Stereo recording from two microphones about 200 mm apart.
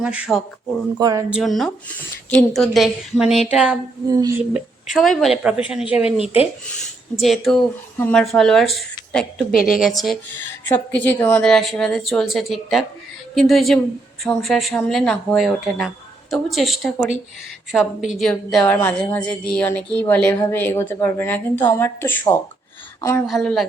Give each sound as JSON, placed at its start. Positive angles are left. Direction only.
{"t": 0.0, "sound": "speech", "side_deg": 0}
{"t": 0.9, "sound": "speech", "side_deg": -20}
{"t": 1.3, "sound": "speech", "side_deg": 0}
{"t": 4.0, "sound": "a woman's voice", "side_deg": -15}
{"t": 7.2, "sound": "a woman's voice", "side_deg": 0}
{"t": 23.2, "sound": "speech", "side_deg": 0}